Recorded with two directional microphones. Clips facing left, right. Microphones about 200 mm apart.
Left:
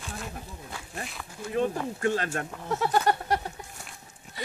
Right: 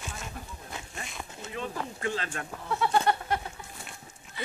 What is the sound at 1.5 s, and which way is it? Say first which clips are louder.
Speech: left 9 dB; 45° left (ahead or behind).